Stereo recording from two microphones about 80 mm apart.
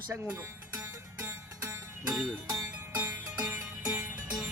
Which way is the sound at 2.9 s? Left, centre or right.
Right.